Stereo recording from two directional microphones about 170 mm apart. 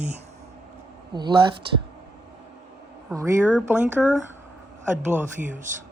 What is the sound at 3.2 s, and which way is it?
Speech, 15° right (ahead or behind).